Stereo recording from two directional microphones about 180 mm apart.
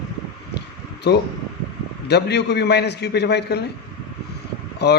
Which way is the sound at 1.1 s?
65° left (ahead or behind).